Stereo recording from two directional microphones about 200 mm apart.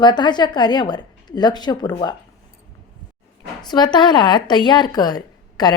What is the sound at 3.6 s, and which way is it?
A woman's voice, 20° left (ahead or behind).